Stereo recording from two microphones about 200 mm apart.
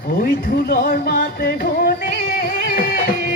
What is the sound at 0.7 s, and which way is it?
Music, 45° left (ahead or behind).